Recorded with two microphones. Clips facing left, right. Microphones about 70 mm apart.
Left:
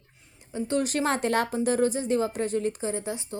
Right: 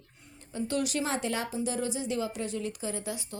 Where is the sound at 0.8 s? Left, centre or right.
Left.